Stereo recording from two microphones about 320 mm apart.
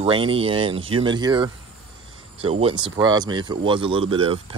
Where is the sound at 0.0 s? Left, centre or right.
Centre.